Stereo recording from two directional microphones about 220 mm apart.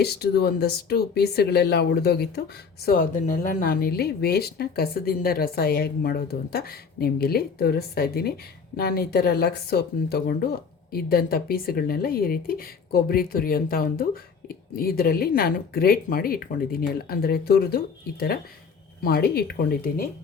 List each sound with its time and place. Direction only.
0.0 s speech: 45° left (ahead or behind)